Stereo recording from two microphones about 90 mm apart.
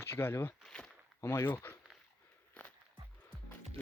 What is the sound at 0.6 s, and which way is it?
Walk, 5° left (ahead or behind).